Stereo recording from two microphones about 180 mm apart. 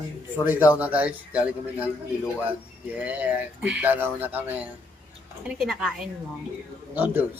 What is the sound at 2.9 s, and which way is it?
Speech, 10° right (ahead or behind).